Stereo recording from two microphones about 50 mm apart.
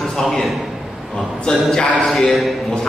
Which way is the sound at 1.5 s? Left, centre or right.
Centre.